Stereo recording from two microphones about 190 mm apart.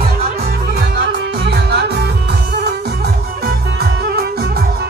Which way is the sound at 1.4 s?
60° right (ahead or behind).